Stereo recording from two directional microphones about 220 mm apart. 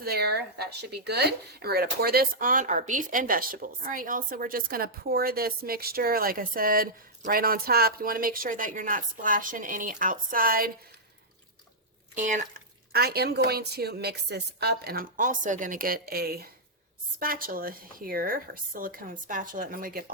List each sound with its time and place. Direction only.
0.0 s speech: 45° right (ahead or behind)
12.1 s a woman's voice: 35° right (ahead or behind)